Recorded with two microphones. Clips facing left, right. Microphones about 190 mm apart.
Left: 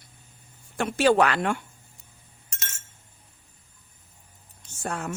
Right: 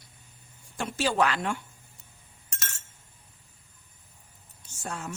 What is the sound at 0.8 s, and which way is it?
Speech, 60° left (ahead or behind).